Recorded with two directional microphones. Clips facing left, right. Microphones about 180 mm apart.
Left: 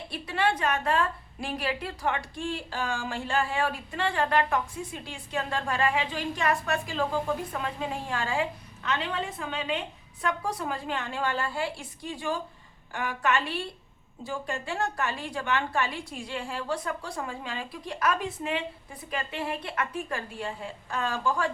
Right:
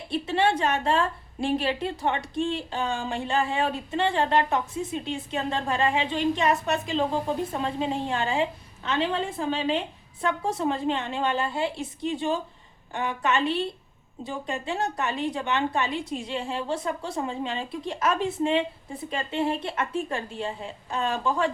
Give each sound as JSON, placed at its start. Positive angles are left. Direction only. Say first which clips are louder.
{"t": 0.1, "sound": "a woman's voice", "louder": "right 4 dB", "side_deg": -25}